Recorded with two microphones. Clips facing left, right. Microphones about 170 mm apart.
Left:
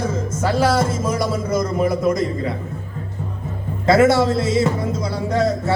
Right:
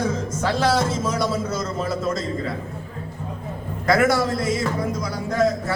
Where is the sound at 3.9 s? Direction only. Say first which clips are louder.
Left 5 dB; 25° left (ahead or behind).